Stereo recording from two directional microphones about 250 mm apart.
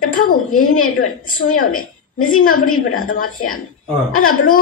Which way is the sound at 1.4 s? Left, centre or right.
Left.